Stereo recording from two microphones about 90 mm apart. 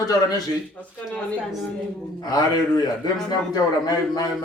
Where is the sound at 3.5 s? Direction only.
45° left (ahead or behind).